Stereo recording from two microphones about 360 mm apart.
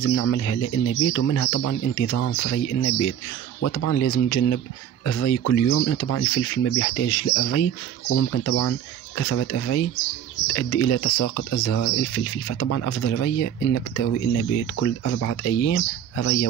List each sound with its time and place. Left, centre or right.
0.1 s speech: left